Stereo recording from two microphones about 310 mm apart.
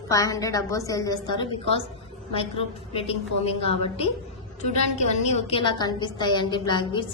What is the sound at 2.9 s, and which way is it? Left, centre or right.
A woman's voice, centre.